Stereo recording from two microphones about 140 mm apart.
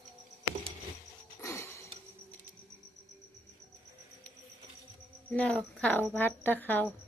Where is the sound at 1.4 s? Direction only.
20° left (ahead or behind).